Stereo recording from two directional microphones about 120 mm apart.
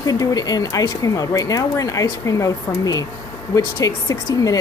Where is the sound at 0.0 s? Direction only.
30° left (ahead or behind).